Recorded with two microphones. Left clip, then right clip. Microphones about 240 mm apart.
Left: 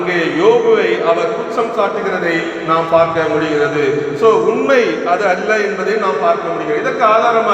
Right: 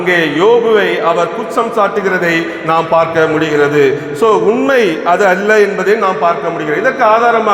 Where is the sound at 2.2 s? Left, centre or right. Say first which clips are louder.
Right 2 dB; right.